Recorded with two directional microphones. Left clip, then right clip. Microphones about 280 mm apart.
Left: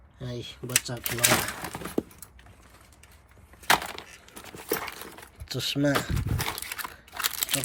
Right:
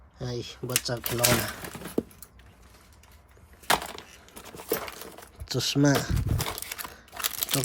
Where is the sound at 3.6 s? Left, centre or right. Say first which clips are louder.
Left 2 dB; centre.